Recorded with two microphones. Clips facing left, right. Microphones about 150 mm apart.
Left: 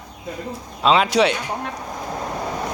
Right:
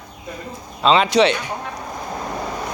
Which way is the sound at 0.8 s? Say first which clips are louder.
Right 1 dB; 5° left (ahead or behind).